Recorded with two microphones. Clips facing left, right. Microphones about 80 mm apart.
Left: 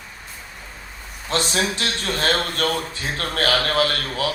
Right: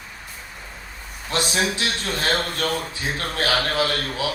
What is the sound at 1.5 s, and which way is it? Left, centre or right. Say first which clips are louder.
A man's voice: even; left.